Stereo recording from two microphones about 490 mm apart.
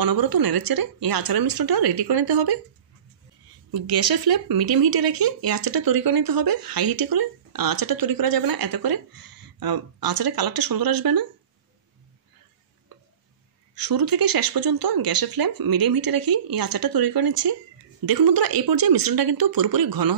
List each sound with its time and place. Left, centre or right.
0.0 s speech: right
3.7 s speech: right
13.7 s speech: right